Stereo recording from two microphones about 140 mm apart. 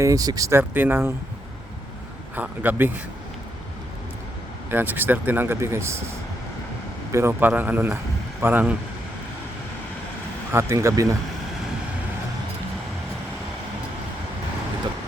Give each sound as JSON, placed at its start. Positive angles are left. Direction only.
{"t": 0.0, "sound": "speech", "side_deg": -25}
{"t": 2.3, "sound": "speech", "side_deg": -15}
{"t": 4.7, "sound": "speech", "side_deg": -15}
{"t": 7.1, "sound": "speech", "side_deg": -15}
{"t": 10.5, "sound": "speech", "side_deg": -20}